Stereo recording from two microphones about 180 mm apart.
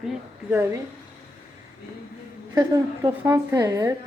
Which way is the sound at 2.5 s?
15° right (ahead or behind).